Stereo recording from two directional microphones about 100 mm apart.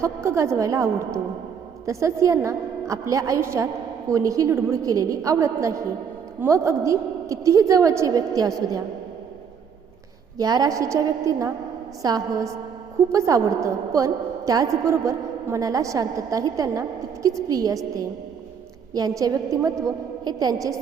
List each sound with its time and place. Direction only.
0.0 s a woman's voice: 30° right (ahead or behind)
10.3 s a woman's voice: 40° right (ahead or behind)